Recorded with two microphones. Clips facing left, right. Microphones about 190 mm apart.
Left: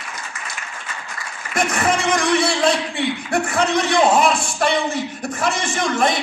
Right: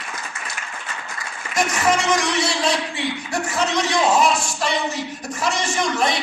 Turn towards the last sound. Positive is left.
turn(degrees=50)  # may be behind; listen again after turning